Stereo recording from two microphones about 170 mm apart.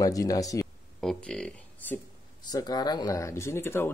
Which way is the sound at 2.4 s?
25° left (ahead or behind).